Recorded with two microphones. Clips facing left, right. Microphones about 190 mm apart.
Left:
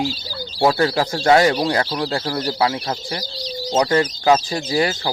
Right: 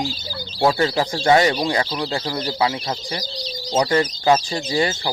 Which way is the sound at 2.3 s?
15° right (ahead or behind).